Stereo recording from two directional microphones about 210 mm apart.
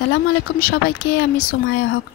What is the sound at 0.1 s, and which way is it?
Speech, 45° left (ahead or behind).